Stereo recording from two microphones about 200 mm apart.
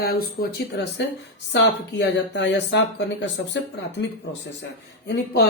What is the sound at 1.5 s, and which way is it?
A woman's voice, 60° left (ahead or behind).